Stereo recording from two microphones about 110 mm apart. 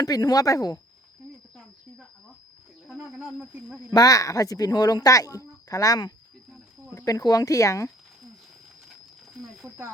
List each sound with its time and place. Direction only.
0.0 s speech: 35° left (ahead or behind)
2.8 s speech: centre (ahead or behind)
3.9 s speech: 35° left (ahead or behind)
9.6 s speech: 25° right (ahead or behind)